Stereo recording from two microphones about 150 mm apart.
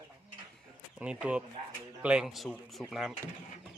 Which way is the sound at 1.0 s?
10° right (ahead or behind).